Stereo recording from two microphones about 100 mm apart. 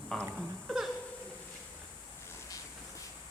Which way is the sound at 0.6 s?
5° right (ahead or behind).